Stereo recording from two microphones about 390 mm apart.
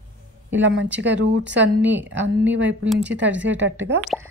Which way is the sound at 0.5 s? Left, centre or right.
Right.